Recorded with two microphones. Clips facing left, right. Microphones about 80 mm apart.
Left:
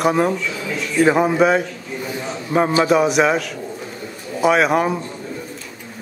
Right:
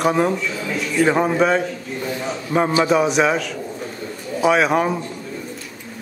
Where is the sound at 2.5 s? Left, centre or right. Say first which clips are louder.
Left 1 dB; centre.